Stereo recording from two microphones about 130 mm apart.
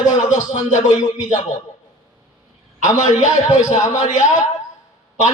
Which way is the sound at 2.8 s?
70° left (ahead or behind).